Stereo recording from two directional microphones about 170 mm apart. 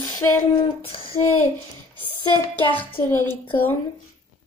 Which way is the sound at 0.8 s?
30° left (ahead or behind).